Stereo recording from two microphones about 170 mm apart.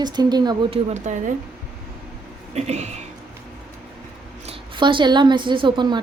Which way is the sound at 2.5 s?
40° right (ahead or behind).